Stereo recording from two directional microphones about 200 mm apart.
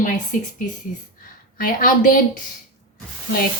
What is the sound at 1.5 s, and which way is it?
Speech, 45° left (ahead or behind).